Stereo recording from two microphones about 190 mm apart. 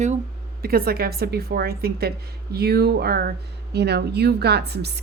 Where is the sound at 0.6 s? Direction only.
50° right (ahead or behind).